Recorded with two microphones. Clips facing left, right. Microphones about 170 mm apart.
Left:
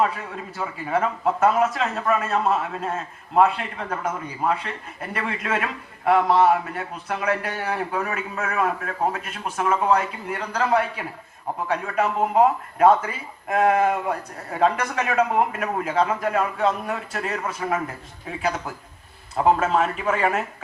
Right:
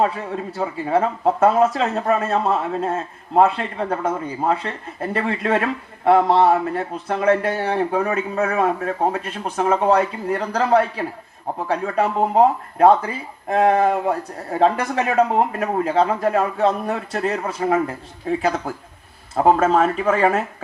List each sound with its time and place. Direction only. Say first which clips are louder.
0.0 s speech: right 3 dB; 35° right (ahead or behind)